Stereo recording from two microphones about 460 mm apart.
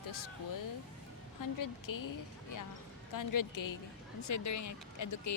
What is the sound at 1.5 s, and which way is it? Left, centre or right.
A woman's voice, left.